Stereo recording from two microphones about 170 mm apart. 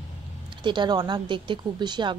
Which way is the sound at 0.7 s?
25° right (ahead or behind).